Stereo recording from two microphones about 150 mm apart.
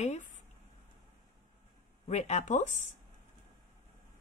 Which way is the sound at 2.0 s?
50° left (ahead or behind).